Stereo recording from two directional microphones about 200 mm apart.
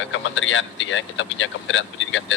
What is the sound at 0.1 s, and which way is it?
Speech, 70° left (ahead or behind).